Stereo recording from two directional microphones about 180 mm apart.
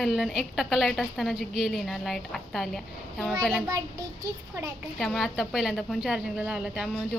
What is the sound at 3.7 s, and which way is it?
A child's voice, 20° right (ahead or behind).